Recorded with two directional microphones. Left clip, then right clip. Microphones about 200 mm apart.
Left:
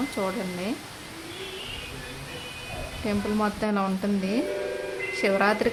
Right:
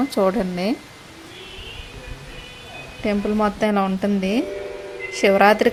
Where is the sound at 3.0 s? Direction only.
20° right (ahead or behind).